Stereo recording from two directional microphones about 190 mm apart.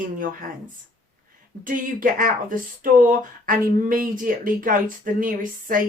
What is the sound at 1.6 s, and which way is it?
Speech, 45° right (ahead or behind).